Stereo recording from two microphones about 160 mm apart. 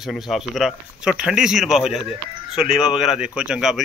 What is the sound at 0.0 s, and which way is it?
A man's voice, centre (ahead or behind).